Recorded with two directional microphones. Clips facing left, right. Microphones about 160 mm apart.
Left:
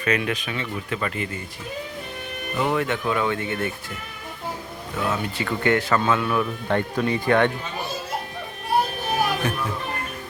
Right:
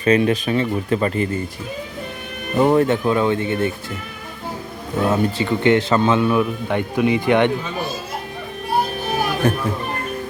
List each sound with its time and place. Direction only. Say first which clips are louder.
0.0 s speech: right 8 dB; 30° right (ahead or behind)
2.6 s speech: right 8 dB; 40° right (ahead or behind)
4.9 s speech: right 8 dB; 35° right (ahead or behind)
5.5 s speech: right 3 dB; 25° right (ahead or behind)
6.4 s speech: right 3 dB; 15° right (ahead or behind)
9.4 s speech: right 8 dB; 45° right (ahead or behind)